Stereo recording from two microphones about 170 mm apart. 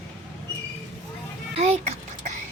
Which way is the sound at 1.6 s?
40° right (ahead or behind).